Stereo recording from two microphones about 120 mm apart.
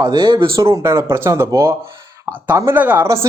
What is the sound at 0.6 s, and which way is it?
Speech, 20° right (ahead or behind).